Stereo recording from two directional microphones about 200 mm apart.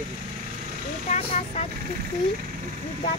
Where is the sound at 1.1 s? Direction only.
30° left (ahead or behind).